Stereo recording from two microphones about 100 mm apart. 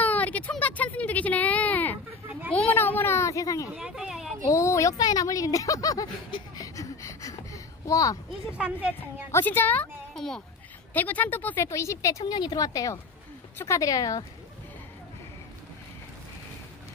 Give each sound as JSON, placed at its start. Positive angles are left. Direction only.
{"t": 0.0, "sound": "a sound", "side_deg": 15}
{"t": 3.7, "sound": "a sound", "side_deg": -5}
{"t": 4.5, "sound": "speech", "side_deg": 30}
{"t": 6.5, "sound": "a sound", "side_deg": 35}
{"t": 8.5, "sound": "speech", "side_deg": -10}
{"t": 9.3, "sound": "speech", "side_deg": 20}
{"t": 10.1, "sound": "a child's voice", "side_deg": 5}
{"t": 10.9, "sound": "speech", "side_deg": 15}
{"t": 12.3, "sound": "a woman's voice", "side_deg": 45}